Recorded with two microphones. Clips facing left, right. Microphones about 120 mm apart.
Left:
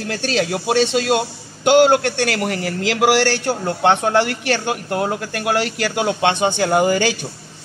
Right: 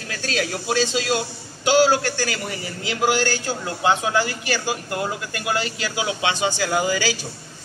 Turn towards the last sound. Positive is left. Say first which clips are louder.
# left 6 dB
turn(degrees=55)  # may be behind; listen again after turning